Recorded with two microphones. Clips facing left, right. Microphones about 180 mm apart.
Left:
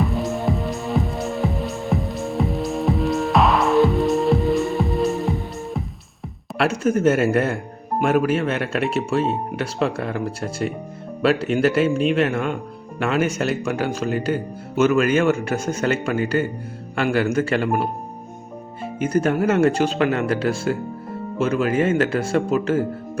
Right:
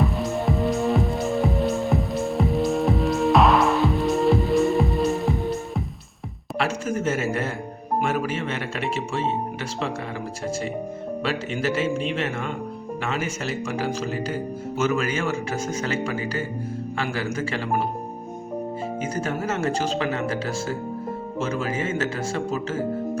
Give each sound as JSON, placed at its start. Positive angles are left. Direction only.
{"t": 0.0, "sound": "music", "side_deg": 0}
{"t": 6.6, "sound": "a man's voice", "side_deg": 65}
{"t": 9.8, "sound": "a man's voice", "side_deg": 65}
{"t": 19.2, "sound": "a man's voice", "side_deg": 60}